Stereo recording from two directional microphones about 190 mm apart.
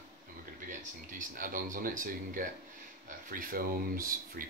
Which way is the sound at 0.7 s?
45° right (ahead or behind).